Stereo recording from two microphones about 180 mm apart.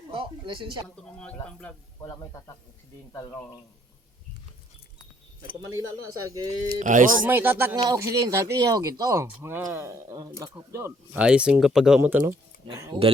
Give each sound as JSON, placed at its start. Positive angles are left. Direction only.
{"t": 0.1, "sound": "a sound", "side_deg": -30}
{"t": 1.0, "sound": "speech", "side_deg": 5}
{"t": 2.0, "sound": "speech", "side_deg": 20}
{"t": 5.7, "sound": "speech", "side_deg": -20}
{"t": 6.7, "sound": "speech", "side_deg": -45}
{"t": 7.3, "sound": "speech", "side_deg": -10}